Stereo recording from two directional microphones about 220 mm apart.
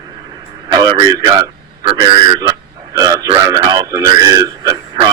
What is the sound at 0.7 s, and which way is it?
A man's voice, 20° right (ahead or behind).